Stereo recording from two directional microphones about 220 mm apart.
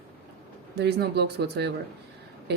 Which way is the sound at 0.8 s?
45° right (ahead or behind).